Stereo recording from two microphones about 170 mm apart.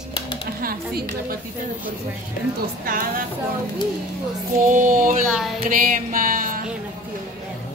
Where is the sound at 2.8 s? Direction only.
55° right (ahead or behind).